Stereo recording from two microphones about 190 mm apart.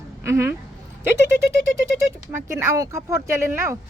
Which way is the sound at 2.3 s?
15° right (ahead or behind).